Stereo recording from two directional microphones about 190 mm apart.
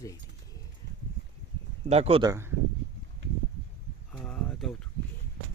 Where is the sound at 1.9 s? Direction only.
30° right (ahead or behind).